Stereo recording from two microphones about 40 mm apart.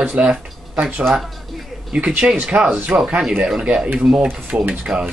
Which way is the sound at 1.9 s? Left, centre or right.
Right.